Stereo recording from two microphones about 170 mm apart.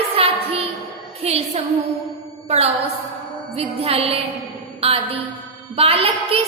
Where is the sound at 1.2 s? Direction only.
35° right (ahead or behind).